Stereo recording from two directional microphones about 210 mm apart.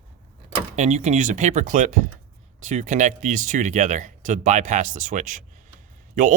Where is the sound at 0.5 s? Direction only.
35° right (ahead or behind).